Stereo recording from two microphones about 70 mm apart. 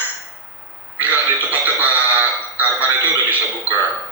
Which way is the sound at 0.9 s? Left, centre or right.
Right.